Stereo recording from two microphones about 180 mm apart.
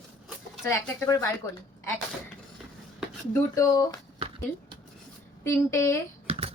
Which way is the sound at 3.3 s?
20° left (ahead or behind).